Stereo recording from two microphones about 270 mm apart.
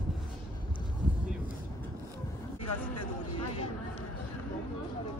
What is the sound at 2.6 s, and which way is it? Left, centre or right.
Speech, left.